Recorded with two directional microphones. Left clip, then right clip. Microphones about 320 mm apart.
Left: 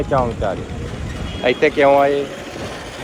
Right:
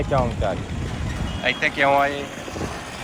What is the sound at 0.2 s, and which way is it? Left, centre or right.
A man's voice, centre.